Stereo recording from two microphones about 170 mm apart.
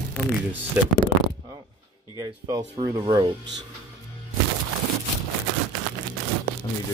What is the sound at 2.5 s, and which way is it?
Speech, 25° right (ahead or behind).